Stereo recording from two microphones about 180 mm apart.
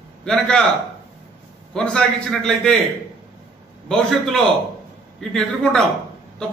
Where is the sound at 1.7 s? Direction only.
5° left (ahead or behind).